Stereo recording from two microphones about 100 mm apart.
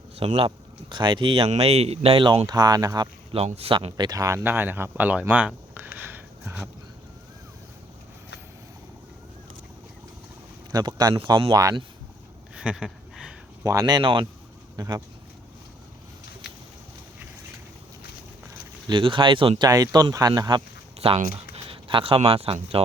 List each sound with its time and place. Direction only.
0.2 s speech: 60° right (ahead or behind)
2.6 s speech: 40° right (ahead or behind)
3.3 s speech: 85° right
3.9 s speech: 40° right (ahead or behind)
4.4 s speech: 20° right (ahead or behind)
5.3 s a sound: 15° right (ahead or behind)
10.7 s speech: 40° right (ahead or behind)
12.5 s a sound: 5° right (ahead or behind)
13.8 s speech: 50° right (ahead or behind)
14.8 s speech: 35° right (ahead or behind)
18.9 s speech: 55° right (ahead or behind)
19.6 s speech: 40° right (ahead or behind)
21.0 s speech: 75° right (ahead or behind)